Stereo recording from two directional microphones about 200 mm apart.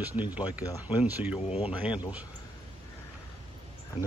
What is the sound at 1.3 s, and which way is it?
Speech, 30° left (ahead or behind).